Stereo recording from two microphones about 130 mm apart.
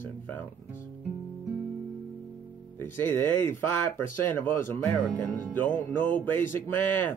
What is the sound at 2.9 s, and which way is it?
Speech, 15° left (ahead or behind).